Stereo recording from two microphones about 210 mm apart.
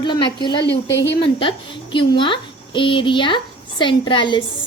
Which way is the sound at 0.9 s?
55° left (ahead or behind).